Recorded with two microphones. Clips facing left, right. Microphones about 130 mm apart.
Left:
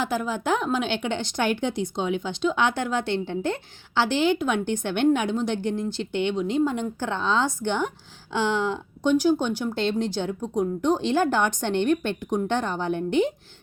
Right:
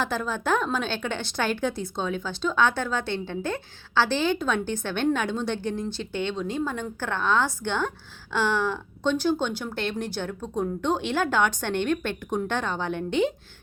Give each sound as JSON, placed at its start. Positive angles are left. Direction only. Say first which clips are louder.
{"t": 0.0, "sound": "a woman's voice", "louder": "left 2 dB", "side_deg": 10}